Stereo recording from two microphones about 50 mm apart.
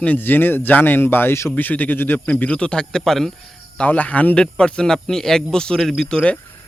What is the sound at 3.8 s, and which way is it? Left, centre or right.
Speech, left.